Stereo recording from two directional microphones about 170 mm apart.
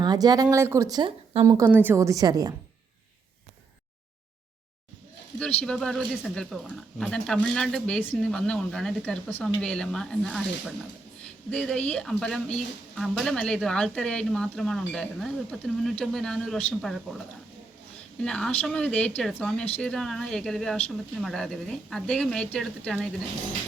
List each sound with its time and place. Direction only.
0.0 s a woman's voice: 25° right (ahead or behind)
1.5 s a woman's voice: 15° right (ahead or behind)
5.4 s speech: 5° left (ahead or behind)
11.5 s speech: 5° left (ahead or behind)
18.2 s speech: 5° left (ahead or behind)